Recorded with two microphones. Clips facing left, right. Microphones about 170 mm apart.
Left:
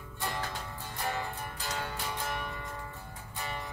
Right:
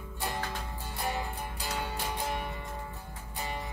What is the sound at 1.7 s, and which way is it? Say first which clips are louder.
Music: right 2 dB; 15° right (ahead or behind).